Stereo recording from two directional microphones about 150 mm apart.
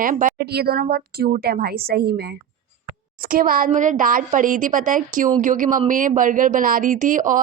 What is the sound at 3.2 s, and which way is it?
A woman's voice, 75° right (ahead or behind).